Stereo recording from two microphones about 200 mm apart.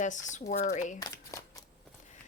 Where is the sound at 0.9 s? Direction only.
20° left (ahead or behind).